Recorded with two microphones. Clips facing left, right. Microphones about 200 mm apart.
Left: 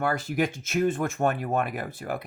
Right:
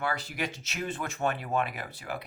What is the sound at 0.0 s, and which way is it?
Speech, 50° left (ahead or behind).